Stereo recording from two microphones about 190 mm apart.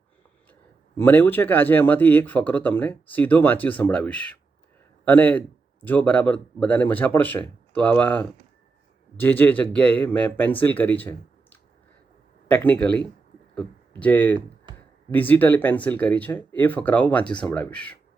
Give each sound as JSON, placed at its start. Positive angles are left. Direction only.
{"t": 0.9, "sound": "speech", "side_deg": 10}
{"t": 14.3, "sound": "a sound", "side_deg": -25}
{"t": 15.1, "sound": "speech", "side_deg": 10}